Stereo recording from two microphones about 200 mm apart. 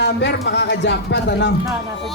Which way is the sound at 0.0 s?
60° left (ahead or behind).